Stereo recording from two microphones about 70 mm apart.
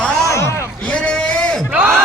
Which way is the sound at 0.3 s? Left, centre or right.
Left.